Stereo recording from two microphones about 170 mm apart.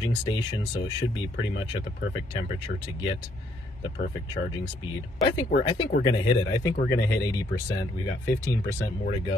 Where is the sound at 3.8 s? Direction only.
25° left (ahead or behind).